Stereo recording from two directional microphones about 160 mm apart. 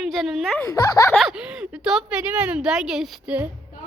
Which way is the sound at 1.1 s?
5° right (ahead or behind).